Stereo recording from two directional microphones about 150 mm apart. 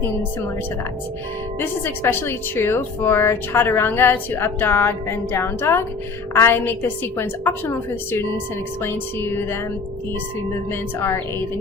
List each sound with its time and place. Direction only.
1.5 s a woman's voice: 15° left (ahead or behind)
10.7 s a woman's voice: 15° left (ahead or behind)